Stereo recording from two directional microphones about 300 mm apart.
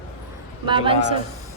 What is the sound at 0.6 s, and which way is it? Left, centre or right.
Speech, centre.